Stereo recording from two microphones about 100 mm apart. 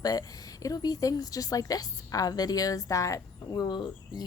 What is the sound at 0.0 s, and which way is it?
A woman's voice, 40° left (ahead or behind).